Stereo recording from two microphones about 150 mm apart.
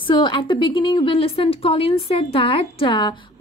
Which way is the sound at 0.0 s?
30° left (ahead or behind).